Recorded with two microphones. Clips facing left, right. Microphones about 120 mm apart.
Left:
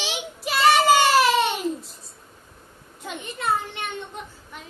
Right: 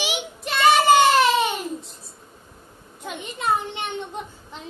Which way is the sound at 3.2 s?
20° right (ahead or behind).